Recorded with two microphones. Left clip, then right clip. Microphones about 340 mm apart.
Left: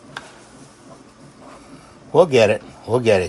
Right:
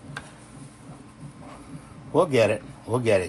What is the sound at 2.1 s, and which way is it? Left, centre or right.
A man's voice, left.